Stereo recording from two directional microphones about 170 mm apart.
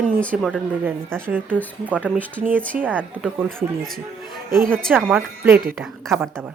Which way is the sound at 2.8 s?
10° right (ahead or behind).